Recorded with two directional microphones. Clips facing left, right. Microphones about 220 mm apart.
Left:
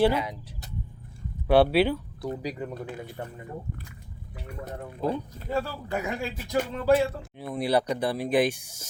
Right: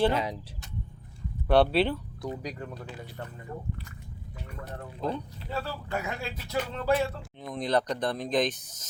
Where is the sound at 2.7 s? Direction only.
55° left (ahead or behind).